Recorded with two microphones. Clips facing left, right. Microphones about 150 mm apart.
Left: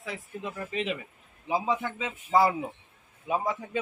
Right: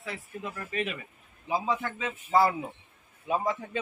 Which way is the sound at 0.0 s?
15° left (ahead or behind).